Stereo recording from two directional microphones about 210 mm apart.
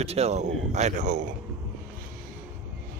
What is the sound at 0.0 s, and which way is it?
Speech, 30° right (ahead or behind).